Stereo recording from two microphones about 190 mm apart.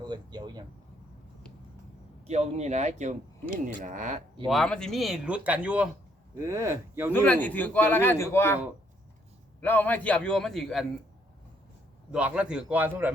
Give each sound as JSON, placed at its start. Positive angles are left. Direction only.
{"t": 0.0, "sound": "speech", "side_deg": -20}
{"t": 2.2, "sound": "speech", "side_deg": -35}
{"t": 4.4, "sound": "a man's voice", "side_deg": 0}
{"t": 7.1, "sound": "a man's voice", "side_deg": 10}
{"t": 9.6, "sound": "a man's voice", "side_deg": 10}
{"t": 12.1, "sound": "a man's voice", "side_deg": -5}